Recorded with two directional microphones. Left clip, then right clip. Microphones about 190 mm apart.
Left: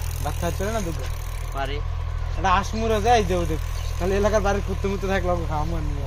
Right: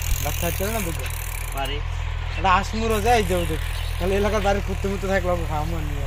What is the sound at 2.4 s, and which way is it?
Speech, 30° left (ahead or behind).